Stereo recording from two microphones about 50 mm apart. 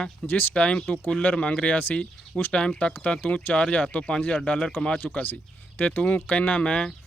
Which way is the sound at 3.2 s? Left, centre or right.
Left.